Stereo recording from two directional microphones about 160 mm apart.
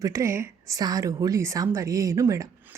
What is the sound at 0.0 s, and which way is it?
Speech, 20° right (ahead or behind).